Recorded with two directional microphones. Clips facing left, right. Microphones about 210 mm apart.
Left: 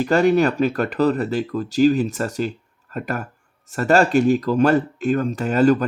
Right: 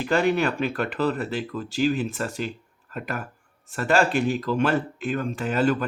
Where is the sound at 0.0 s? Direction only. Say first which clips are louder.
Left 6 dB; 40° left (ahead or behind).